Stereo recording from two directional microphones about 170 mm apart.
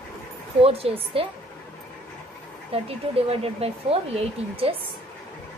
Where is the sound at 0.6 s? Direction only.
35° right (ahead or behind).